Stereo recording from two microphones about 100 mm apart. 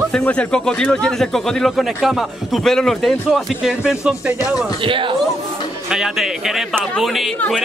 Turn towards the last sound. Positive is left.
turn(degrees=0)  # may be behind; listen again after turning